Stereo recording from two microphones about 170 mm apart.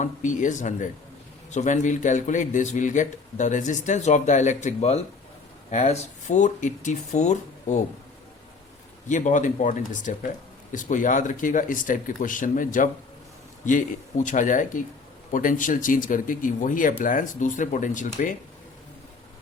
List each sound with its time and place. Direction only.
0.0 s a man's voice: 45° left (ahead or behind)
9.0 s a man's voice: 45° left (ahead or behind)